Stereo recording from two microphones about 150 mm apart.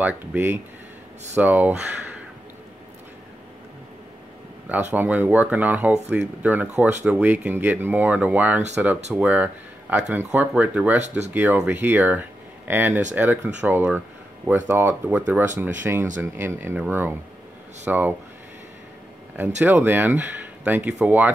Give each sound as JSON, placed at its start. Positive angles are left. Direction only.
{"t": 0.0, "sound": "speech", "side_deg": -10}
{"t": 4.9, "sound": "speech", "side_deg": -10}
{"t": 11.0, "sound": "speech", "side_deg": -50}
{"t": 11.3, "sound": "speech", "side_deg": -10}
{"t": 19.6, "sound": "speech", "side_deg": -15}